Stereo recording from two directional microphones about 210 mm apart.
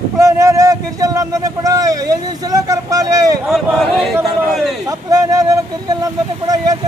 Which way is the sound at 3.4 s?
Centre (ahead or behind).